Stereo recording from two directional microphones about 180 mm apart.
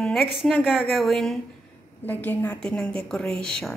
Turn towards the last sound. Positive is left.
turn(degrees=5)  # may be behind; listen again after turning